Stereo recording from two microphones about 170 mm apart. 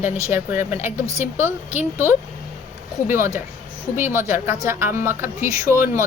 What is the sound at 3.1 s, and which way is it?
A woman's voice, 15° right (ahead or behind).